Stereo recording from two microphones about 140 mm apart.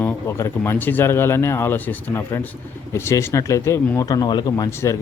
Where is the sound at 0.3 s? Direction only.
20° left (ahead or behind).